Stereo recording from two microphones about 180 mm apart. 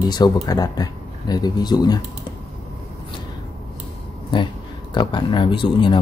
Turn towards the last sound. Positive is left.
turn(degrees=25)  # may be behind; listen again after turning